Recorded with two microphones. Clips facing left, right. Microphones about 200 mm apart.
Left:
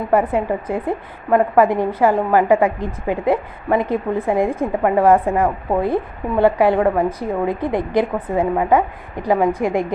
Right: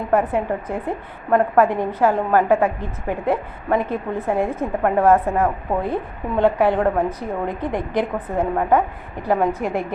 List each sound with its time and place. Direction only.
0.1 s a woman's voice: 10° left (ahead or behind)